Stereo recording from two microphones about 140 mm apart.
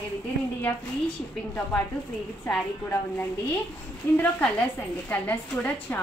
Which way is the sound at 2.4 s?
15° left (ahead or behind).